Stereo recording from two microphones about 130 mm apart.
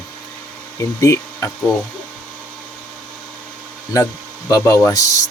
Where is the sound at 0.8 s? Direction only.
20° left (ahead or behind).